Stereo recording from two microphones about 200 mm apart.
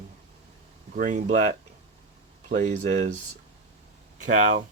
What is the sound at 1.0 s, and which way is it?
Speech, 40° right (ahead or behind).